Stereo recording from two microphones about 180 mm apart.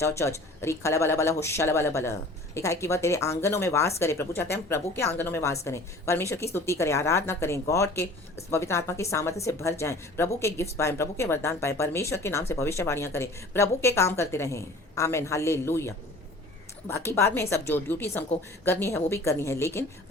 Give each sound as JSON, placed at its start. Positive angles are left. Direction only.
{"t": 0.0, "sound": "speech", "side_deg": 15}